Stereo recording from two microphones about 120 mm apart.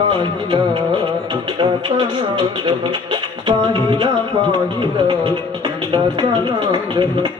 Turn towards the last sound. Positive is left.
turn(degrees=-45)  # may be behind; listen again after turning